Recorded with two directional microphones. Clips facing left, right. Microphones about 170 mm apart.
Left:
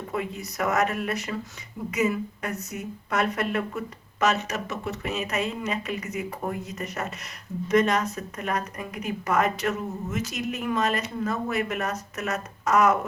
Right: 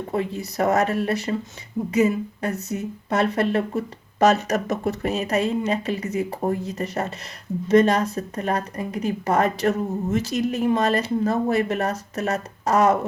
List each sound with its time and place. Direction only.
0.1 s a woman's voice: 30° right (ahead or behind)